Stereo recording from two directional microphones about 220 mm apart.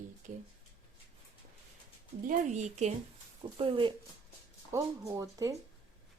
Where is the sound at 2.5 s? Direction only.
30° right (ahead or behind).